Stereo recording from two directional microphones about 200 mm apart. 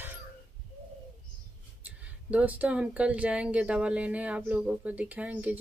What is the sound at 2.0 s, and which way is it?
Speech, 5° right (ahead or behind).